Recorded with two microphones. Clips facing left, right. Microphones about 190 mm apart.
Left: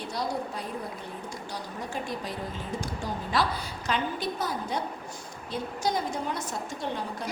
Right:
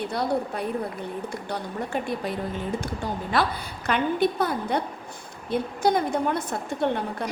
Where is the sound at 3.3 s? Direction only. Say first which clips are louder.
Right 2 dB; 55° right (ahead or behind).